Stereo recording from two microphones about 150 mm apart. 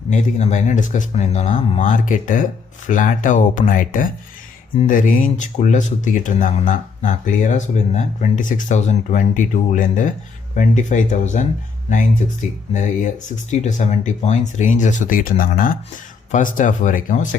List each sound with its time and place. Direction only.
0.1 s speech: 50° left (ahead or behind)